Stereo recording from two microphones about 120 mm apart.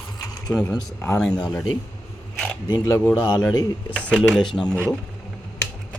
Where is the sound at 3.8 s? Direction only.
10° left (ahead or behind).